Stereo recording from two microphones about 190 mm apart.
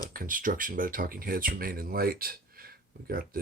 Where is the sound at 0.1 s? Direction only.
45° right (ahead or behind).